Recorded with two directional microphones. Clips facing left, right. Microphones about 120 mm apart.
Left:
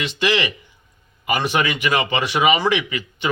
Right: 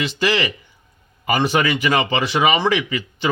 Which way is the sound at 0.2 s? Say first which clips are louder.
Left 1 dB; 35° right (ahead or behind).